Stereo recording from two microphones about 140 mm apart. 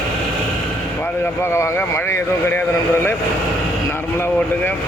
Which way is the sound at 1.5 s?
20° left (ahead or behind).